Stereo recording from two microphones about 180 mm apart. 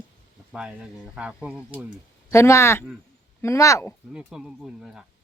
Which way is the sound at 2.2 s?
15° left (ahead or behind).